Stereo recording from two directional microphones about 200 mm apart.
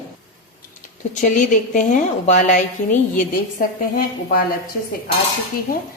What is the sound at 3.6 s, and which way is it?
Speech, 45° left (ahead or behind).